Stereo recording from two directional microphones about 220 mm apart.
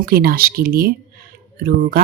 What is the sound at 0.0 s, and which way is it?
Speech, 45° right (ahead or behind).